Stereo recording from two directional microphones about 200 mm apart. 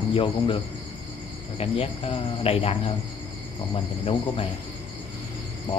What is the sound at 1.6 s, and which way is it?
Speech, 30° left (ahead or behind).